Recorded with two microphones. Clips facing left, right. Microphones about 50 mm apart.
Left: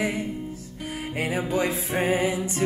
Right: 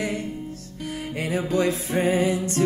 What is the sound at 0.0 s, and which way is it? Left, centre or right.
Music, centre.